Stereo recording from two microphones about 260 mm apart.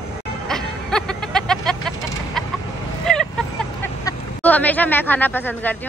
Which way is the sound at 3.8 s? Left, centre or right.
Centre.